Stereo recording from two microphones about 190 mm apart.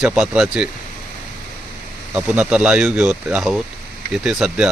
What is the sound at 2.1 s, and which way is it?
Speech, 5° right (ahead or behind).